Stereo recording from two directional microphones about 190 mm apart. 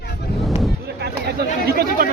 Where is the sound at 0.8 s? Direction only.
60° right (ahead or behind).